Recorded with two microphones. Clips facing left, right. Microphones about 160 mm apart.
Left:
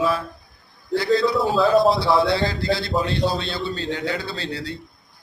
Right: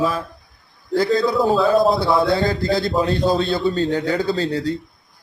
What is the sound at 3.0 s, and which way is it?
A man's voice, 45° right (ahead or behind).